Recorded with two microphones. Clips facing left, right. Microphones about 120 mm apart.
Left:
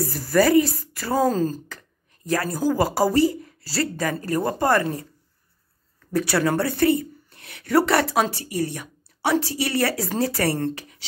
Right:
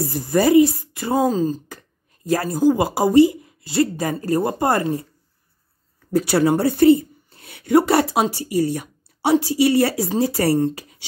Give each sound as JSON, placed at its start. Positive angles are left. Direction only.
{"t": 0.0, "sound": "a woman's voice", "side_deg": -25}
{"t": 1.2, "sound": "speech", "side_deg": -10}
{"t": 2.3, "sound": "speech", "side_deg": -25}
{"t": 6.1, "sound": "speech", "side_deg": -25}